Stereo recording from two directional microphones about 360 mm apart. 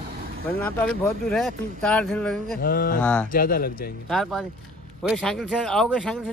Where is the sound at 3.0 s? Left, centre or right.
Centre.